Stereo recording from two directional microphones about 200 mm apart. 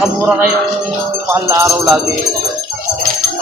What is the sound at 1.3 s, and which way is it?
Jingle bell, 15° right (ahead or behind).